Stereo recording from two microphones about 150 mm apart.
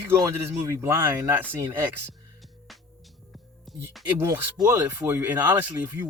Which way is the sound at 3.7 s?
Centre (ahead or behind).